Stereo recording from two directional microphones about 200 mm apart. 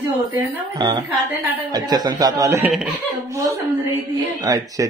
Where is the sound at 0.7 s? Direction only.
20° right (ahead or behind).